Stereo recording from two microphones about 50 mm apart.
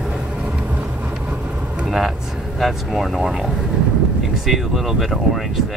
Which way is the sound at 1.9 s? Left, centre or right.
Centre.